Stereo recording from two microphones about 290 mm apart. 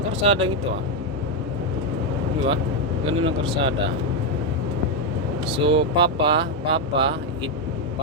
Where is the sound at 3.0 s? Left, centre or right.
Centre.